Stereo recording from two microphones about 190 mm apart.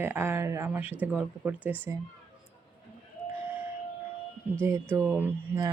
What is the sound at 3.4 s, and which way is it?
Train, 10° right (ahead or behind).